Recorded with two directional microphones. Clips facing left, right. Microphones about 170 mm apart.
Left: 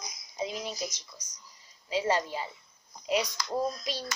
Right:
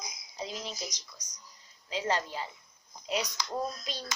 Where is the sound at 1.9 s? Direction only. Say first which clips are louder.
Left 3 dB; 10° left (ahead or behind).